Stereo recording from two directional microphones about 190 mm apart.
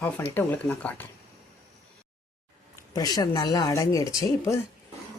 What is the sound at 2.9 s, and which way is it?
A woman's voice, 20° left (ahead or behind).